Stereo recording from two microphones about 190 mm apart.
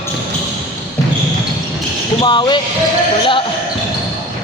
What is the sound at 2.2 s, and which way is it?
Speech, 25° left (ahead or behind).